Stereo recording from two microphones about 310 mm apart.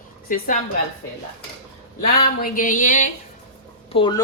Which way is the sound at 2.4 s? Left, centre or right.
Left.